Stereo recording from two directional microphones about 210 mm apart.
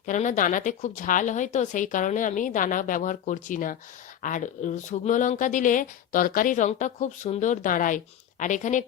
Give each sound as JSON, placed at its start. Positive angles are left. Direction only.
{"t": 0.0, "sound": "speech", "side_deg": 35}